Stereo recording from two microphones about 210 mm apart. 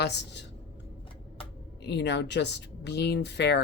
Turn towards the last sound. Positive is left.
turn(degrees=55)  # may be behind; listen again after turning